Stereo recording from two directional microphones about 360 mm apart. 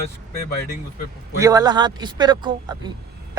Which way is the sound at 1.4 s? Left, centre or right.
Centre.